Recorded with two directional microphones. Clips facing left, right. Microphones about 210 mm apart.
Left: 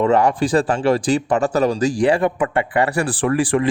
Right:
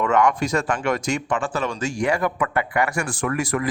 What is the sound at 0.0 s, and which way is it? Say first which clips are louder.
Speech: left 4 dB; 30° left (ahead or behind).